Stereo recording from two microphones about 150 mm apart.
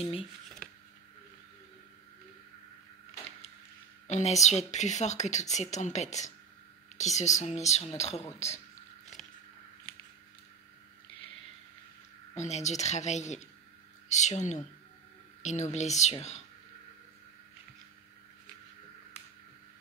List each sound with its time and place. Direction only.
0.2 s a sound: 5° left (ahead or behind)
4.1 s speech: 50° left (ahead or behind)
12.4 s speech: 50° left (ahead or behind)